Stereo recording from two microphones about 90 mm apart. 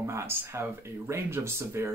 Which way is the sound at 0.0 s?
30° right (ahead or behind).